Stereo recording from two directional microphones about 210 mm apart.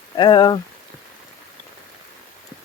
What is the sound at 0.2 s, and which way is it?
Speech, 20° left (ahead or behind).